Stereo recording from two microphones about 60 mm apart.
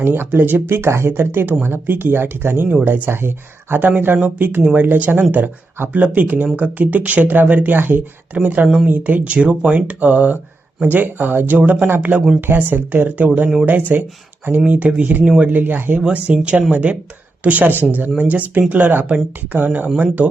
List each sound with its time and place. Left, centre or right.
0.0 s speech: right
0.7 s speech: right
8.6 s speech: centre
8.9 s speech: right